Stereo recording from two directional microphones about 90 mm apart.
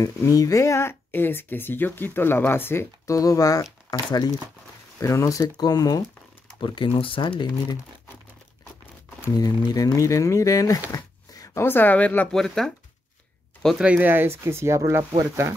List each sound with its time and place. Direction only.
0.3 s speech: 40° left (ahead or behind)
3.2 s speech: 40° left (ahead or behind)
3.9 s speech: 50° left (ahead or behind)
5.0 s speech: 35° left (ahead or behind)
6.6 s speech: 70° left (ahead or behind)
9.3 s speech: 45° left (ahead or behind)
10.0 s speech: 35° left (ahead or behind)
11.3 s a sound: 35° left (ahead or behind)
11.6 s speech: 20° left (ahead or behind)
12.3 s speech: 5° left (ahead or behind)
13.7 s speech: 15° right (ahead or behind); by 15.5 s 30° right (ahead or behind)